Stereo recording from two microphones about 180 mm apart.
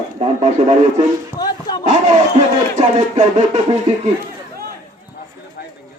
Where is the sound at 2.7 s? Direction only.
40° right (ahead or behind).